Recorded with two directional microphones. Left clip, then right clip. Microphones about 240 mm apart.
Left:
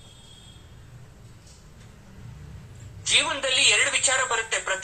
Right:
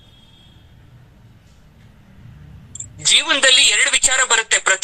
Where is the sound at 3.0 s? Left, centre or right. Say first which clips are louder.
Right 9 dB; right.